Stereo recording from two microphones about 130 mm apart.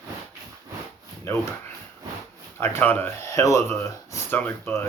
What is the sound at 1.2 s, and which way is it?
Speech, 20° left (ahead or behind).